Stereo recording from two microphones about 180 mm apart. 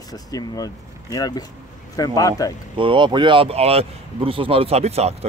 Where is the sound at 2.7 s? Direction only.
25° right (ahead or behind).